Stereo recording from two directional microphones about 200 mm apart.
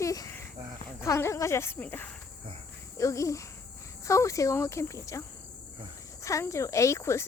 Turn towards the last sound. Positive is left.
turn(degrees=15)  # may be behind; listen again after turning